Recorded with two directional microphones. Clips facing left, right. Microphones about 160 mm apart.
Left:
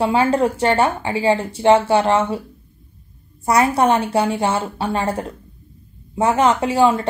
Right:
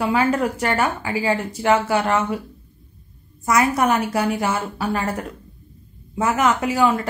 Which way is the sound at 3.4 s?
30° left (ahead or behind).